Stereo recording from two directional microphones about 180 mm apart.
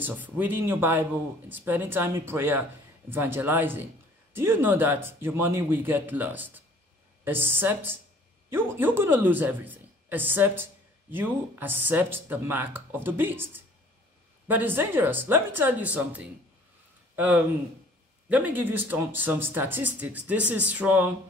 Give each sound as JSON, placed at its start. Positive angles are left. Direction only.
{"t": 0.0, "sound": "speech", "side_deg": -10}